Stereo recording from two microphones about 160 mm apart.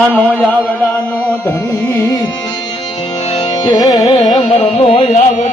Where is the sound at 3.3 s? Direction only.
30° left (ahead or behind).